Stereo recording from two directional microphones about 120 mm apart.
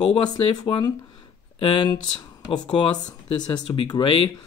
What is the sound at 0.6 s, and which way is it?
Speech, 35° left (ahead or behind).